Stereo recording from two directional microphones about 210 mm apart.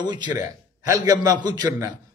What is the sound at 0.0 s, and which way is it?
A man's voice, 20° right (ahead or behind).